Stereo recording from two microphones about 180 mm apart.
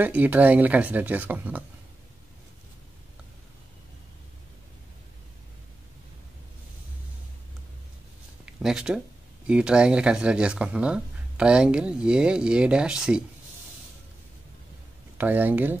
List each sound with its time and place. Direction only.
0.0 s speech: 10° right (ahead or behind)
8.5 s speech: 5° right (ahead or behind)
15.1 s speech: 10° right (ahead or behind)